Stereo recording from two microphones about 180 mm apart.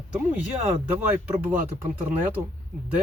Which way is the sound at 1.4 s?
45° right (ahead or behind).